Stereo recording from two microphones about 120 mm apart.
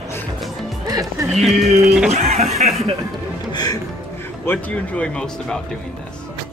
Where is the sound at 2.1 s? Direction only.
60° right (ahead or behind).